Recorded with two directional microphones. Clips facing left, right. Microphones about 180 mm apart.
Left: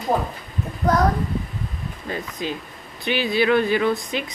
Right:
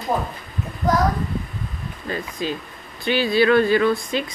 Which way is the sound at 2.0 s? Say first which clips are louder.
Right 2 dB; 20° left (ahead or behind).